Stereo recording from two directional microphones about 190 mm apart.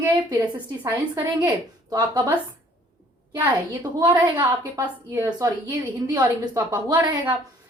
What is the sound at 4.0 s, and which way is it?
A woman's voice, 20° right (ahead or behind).